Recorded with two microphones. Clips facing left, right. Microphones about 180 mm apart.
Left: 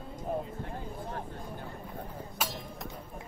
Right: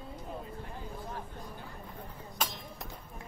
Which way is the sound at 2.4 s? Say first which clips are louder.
Even; 5° left (ahead or behind).